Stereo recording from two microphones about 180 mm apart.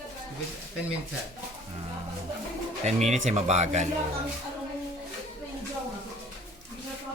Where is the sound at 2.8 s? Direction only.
40° right (ahead or behind).